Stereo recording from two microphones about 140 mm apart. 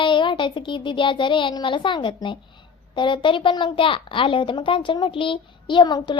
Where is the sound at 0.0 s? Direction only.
35° left (ahead or behind).